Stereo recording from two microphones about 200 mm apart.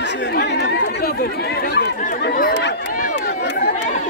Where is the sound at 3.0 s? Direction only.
45° left (ahead or behind).